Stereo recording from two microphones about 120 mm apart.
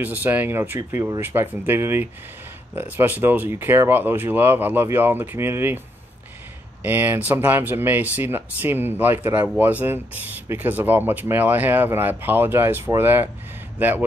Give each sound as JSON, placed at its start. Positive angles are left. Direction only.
{"t": 0.0, "sound": "speech", "side_deg": -15}
{"t": 6.8, "sound": "speech", "side_deg": -15}